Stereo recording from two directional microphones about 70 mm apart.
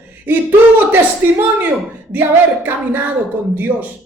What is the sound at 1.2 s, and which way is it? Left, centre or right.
Speech, right.